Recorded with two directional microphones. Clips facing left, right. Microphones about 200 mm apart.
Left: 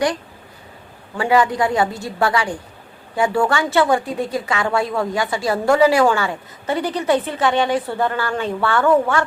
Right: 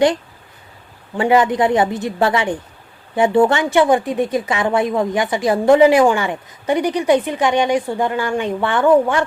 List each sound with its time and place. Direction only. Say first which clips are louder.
1.1 s a woman's voice: right 3 dB; 20° right (ahead or behind)